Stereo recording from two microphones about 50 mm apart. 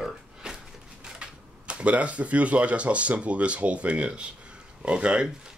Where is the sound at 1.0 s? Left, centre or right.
Right.